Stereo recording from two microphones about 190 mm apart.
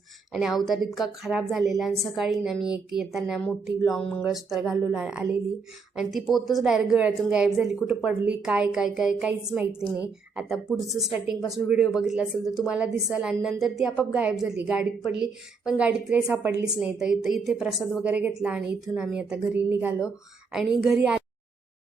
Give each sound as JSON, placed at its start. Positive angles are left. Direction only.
{"t": 0.3, "sound": "a woman's voice", "side_deg": 0}